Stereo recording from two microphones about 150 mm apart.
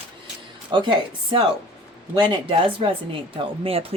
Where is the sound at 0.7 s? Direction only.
30° right (ahead or behind).